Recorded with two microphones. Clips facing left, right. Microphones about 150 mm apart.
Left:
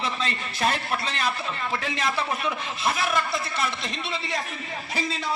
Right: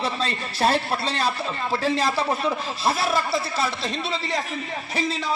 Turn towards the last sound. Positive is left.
turn(degrees=-30)  # may be behind; listen again after turning